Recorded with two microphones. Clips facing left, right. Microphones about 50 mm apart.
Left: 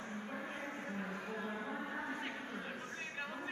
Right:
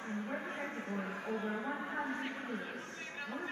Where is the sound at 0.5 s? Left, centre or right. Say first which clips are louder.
Right 3 dB; centre.